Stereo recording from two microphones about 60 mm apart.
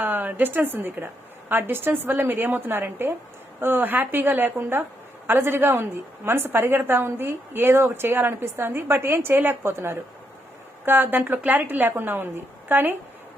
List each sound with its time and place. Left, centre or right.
0.0 s a woman's voice: right